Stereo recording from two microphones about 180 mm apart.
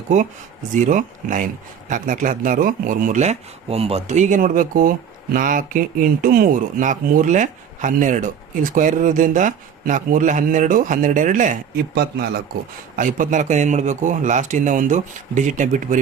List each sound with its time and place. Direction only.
0.7 s speech: 45° right (ahead or behind)
13.0 s speech: 45° right (ahead or behind)